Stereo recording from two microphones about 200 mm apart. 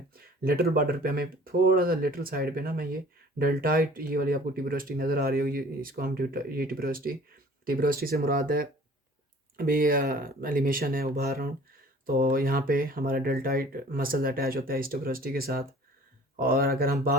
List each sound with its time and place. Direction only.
0.4 s speech: 50° right (ahead or behind)